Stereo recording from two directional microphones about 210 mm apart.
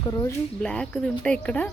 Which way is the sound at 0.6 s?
5° left (ahead or behind).